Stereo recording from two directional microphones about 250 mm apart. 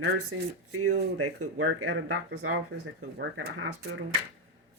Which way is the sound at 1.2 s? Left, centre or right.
Right.